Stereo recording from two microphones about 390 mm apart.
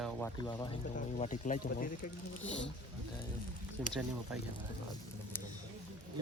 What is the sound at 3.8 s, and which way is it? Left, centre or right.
Speech, centre.